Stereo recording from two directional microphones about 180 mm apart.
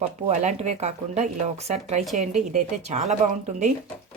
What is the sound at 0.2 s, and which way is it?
Speech, 40° right (ahead or behind).